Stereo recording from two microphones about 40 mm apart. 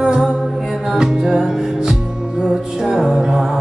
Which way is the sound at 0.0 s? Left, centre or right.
Centre.